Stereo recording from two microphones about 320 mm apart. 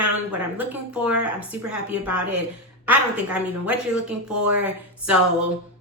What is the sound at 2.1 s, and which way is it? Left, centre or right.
Speech, right.